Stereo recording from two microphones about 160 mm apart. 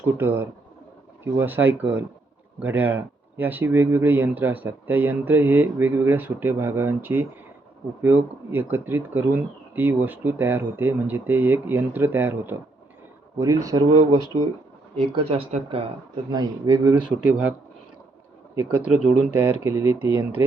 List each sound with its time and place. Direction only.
0.1 s speech: 15° right (ahead or behind)
14.9 s speech: 35° right (ahead or behind)
16.3 s speech: 20° right (ahead or behind); by 17.5 s 5° right (ahead or behind)
18.7 s speech: 10° right (ahead or behind)